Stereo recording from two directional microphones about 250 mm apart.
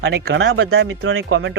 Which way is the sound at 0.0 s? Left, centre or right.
Right.